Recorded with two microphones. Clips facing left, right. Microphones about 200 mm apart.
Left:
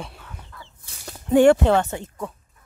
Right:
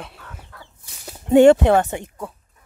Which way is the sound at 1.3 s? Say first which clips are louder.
Right 3 dB; 20° right (ahead or behind).